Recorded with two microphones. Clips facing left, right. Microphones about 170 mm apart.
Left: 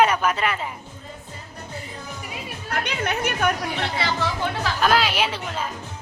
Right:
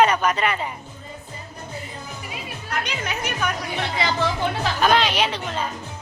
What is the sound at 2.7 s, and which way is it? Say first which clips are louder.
Speech: left 3 dB; 60° left (ahead or behind).